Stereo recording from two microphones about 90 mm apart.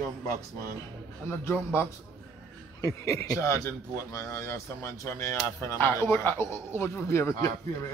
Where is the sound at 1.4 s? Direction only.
25° left (ahead or behind).